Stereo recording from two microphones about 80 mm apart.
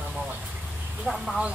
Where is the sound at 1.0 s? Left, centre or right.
Centre.